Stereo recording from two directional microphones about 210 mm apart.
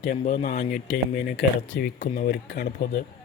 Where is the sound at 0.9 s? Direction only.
50° left (ahead or behind).